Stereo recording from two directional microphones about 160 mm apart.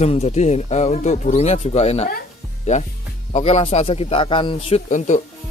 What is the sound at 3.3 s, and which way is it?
Speech, 40° left (ahead or behind).